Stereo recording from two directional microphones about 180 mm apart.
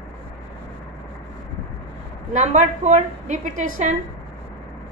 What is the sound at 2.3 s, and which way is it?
A woman's voice, 40° right (ahead or behind).